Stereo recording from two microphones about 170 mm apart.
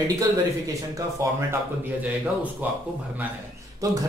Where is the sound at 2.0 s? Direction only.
10° right (ahead or behind).